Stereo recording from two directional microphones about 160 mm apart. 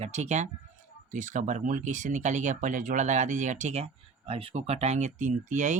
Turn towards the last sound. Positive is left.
turn(degrees=-50)  # may be behind; listen again after turning